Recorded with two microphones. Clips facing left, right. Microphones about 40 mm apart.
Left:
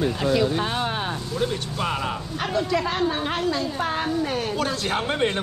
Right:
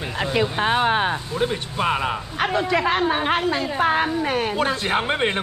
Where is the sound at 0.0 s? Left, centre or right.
Right.